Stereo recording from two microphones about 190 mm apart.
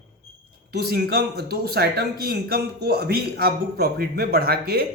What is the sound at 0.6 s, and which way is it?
A man's voice, 55° right (ahead or behind).